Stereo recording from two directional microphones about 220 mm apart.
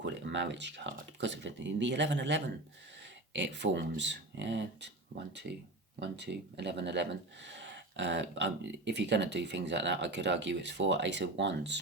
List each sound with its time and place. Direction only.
0.0 s speech: 55° right (ahead or behind)